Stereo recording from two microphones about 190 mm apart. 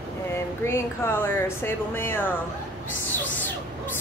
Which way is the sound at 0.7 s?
10° left (ahead or behind).